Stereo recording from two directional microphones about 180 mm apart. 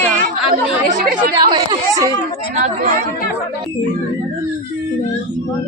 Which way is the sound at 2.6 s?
40° right (ahead or behind).